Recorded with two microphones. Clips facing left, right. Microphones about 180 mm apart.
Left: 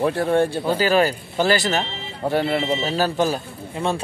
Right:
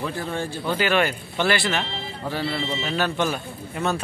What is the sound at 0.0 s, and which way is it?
Speech, 55° left (ahead or behind).